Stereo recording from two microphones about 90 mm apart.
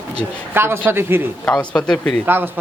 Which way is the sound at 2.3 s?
25° right (ahead or behind).